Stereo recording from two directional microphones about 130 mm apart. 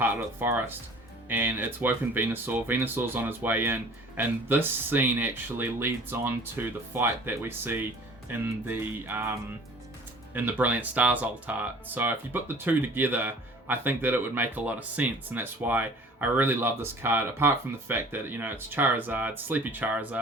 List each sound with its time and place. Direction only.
0.0 s speech: 15° right (ahead or behind)